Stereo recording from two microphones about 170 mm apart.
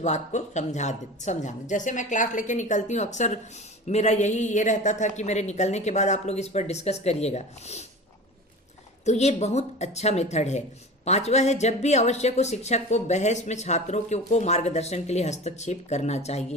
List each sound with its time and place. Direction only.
0.0 s a woman's voice: 45° left (ahead or behind)
9.0 s speech: 40° left (ahead or behind)